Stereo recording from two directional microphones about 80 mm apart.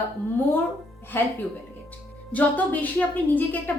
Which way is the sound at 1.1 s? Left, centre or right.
Left.